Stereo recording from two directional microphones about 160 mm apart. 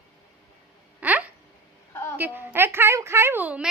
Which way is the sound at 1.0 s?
10° right (ahead or behind).